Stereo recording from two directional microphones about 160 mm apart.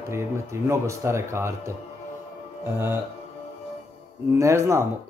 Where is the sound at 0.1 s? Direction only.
15° right (ahead or behind).